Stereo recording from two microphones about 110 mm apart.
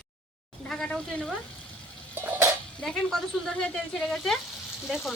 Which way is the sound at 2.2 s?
20° right (ahead or behind).